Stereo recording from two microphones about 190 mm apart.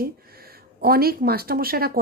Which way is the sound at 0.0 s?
50° right (ahead or behind).